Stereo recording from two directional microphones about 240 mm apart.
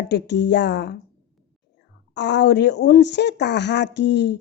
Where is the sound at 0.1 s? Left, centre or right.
Left.